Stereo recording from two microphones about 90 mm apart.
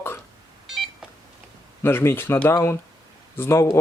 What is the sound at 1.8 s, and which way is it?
Speech, 25° left (ahead or behind).